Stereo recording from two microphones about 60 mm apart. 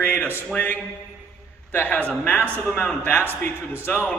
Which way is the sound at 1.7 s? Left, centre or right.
Left.